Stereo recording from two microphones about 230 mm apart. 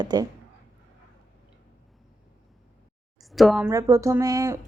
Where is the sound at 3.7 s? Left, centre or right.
Centre.